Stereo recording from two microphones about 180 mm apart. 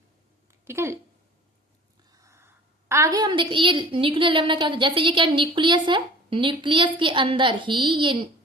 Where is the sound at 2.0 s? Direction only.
20° right (ahead or behind).